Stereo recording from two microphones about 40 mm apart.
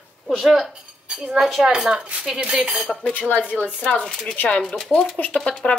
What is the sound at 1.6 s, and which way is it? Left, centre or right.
Speech, centre.